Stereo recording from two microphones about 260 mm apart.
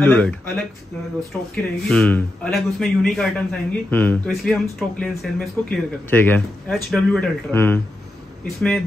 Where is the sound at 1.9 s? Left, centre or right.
Centre.